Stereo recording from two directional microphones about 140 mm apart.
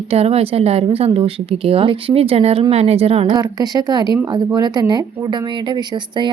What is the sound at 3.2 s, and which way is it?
Speech, 30° right (ahead or behind).